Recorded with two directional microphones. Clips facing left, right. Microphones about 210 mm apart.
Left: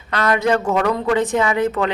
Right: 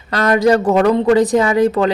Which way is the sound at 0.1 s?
40° right (ahead or behind).